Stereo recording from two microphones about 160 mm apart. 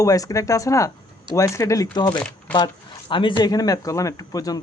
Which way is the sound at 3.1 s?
30° left (ahead or behind).